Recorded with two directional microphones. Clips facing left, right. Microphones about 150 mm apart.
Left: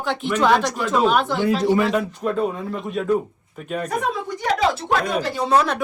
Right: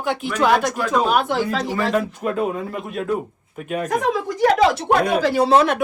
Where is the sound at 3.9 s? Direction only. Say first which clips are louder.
Right 5 dB; 90° right.